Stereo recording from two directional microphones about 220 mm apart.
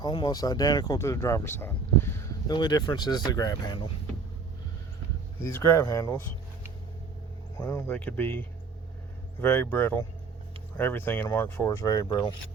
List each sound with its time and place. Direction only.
0.0 s speech: 20° left (ahead or behind)
5.4 s speech: 10° left (ahead or behind)
7.6 s speech: 10° left (ahead or behind)